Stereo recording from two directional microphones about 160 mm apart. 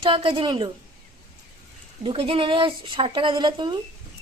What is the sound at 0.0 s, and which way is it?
Speech, 35° right (ahead or behind).